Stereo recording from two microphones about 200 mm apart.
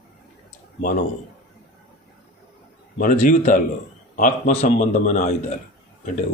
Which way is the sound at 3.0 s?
40° left (ahead or behind).